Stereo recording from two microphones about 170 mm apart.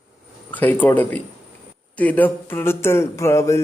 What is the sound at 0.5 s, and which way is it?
Speech, 10° left (ahead or behind).